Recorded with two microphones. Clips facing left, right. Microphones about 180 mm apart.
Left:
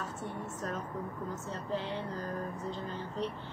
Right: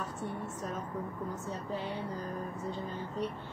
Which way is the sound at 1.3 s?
10° right (ahead or behind).